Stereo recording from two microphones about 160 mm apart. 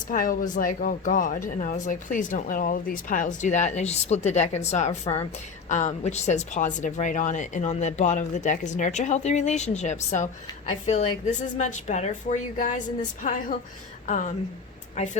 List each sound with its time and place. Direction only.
0.1 s a woman's voice: 60° left (ahead or behind)